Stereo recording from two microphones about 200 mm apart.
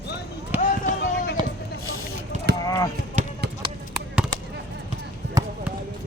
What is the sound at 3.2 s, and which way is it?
Basketball bounce, 35° right (ahead or behind).